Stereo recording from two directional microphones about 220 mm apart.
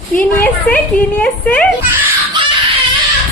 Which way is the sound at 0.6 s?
5° left (ahead or behind).